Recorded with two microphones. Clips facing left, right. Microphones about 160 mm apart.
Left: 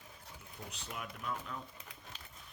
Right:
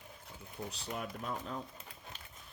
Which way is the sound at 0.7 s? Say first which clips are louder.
Right 3 dB; 35° right (ahead or behind).